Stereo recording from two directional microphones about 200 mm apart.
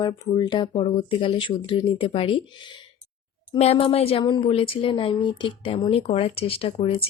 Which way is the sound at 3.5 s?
30° left (ahead or behind).